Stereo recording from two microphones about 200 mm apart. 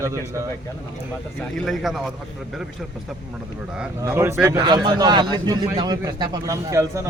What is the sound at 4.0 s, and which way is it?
Speech, 10° right (ahead or behind).